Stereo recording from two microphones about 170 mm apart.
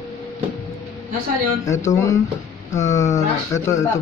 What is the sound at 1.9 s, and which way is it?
Speech, 20° left (ahead or behind).